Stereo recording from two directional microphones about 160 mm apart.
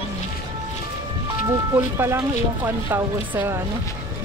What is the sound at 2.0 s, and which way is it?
Speech, 15° right (ahead or behind).